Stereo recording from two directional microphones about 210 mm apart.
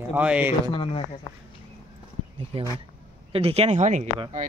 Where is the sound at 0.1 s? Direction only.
5° right (ahead or behind).